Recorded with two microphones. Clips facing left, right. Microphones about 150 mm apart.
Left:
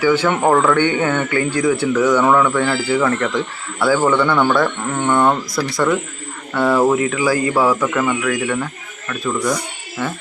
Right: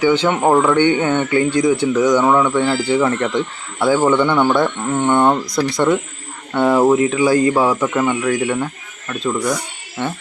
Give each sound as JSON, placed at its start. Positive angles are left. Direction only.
{"t": 0.0, "sound": "speech", "side_deg": -20}